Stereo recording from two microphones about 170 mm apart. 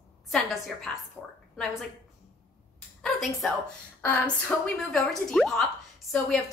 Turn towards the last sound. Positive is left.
turn(degrees=5)  # may be behind; listen again after turning